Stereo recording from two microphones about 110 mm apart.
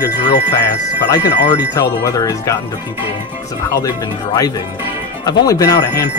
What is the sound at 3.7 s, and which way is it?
Speech, 30° left (ahead or behind).